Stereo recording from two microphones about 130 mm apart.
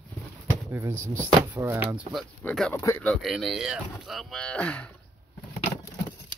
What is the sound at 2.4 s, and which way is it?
Speech, 10° left (ahead or behind).